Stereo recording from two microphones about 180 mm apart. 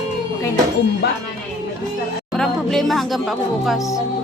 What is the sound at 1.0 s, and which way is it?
Speech, 65° left (ahead or behind).